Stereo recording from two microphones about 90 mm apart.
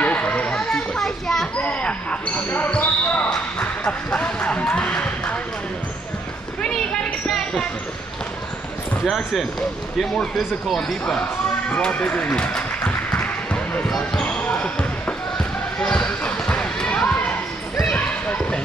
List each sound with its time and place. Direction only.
0.0 s children playing: 15° left (ahead or behind)
1.6 s speech: 15° left (ahead or behind)
3.5 s basketball bounce: 10° left (ahead or behind)
6.6 s a sound: 10° left (ahead or behind)
9.0 s speech: centre (ahead or behind)
11.7 s a sound: 15° left (ahead or behind)
13.8 s basketball bounce: 5° left (ahead or behind)